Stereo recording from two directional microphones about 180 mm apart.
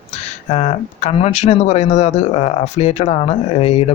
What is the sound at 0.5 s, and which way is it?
Speech, 35° left (ahead or behind).